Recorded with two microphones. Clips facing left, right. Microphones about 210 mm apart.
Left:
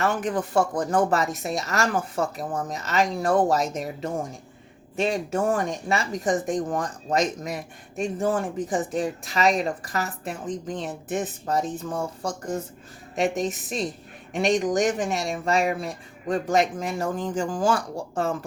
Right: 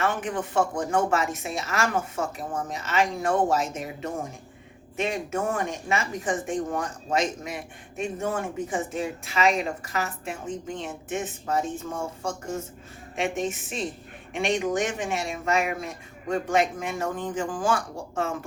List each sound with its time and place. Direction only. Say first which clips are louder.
0.0 s speech: left 3 dB; 35° left (ahead or behind)